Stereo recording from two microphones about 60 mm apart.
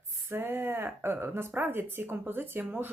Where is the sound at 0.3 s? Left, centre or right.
Right.